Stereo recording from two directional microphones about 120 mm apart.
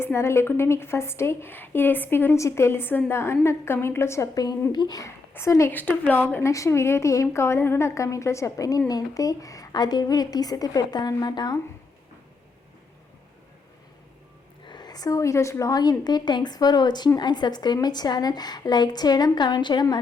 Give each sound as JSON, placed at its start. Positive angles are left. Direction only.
{"t": 0.0, "sound": "a woman's voice", "side_deg": 20}
{"t": 14.7, "sound": "a woman's voice", "side_deg": 35}